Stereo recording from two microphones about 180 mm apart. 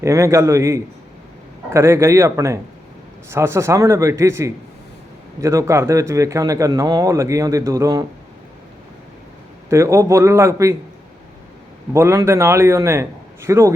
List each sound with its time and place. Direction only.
0.0 s a man's voice: 15° right (ahead or behind)
9.6 s a man's voice: 15° right (ahead or behind)
11.9 s a man's voice: 15° right (ahead or behind)